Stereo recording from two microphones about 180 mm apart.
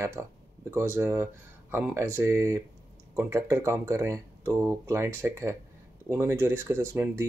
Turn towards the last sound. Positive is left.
turn(degrees=-15)  # may be behind; listen again after turning